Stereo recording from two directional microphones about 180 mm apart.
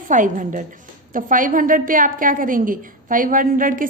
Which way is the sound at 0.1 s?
45° right (ahead or behind).